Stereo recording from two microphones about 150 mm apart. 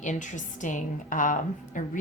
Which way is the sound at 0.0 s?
55° left (ahead or behind).